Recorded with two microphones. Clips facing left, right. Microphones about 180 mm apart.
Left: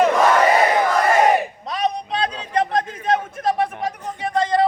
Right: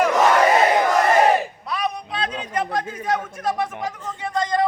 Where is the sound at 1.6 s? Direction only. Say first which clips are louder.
Left 3 dB; 35° left (ahead or behind).